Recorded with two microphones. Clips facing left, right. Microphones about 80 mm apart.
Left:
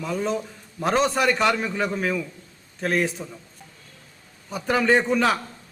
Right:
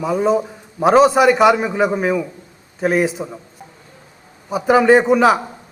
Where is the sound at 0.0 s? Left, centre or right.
Centre.